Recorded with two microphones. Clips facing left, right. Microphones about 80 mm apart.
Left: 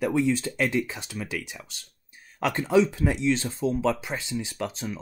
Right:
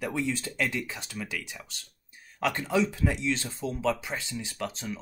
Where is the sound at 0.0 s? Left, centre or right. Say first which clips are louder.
Left 7 dB; left.